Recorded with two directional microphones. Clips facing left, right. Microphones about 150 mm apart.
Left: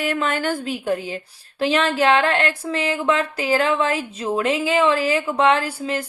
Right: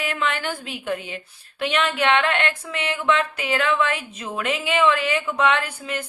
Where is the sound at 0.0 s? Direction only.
40° left (ahead or behind).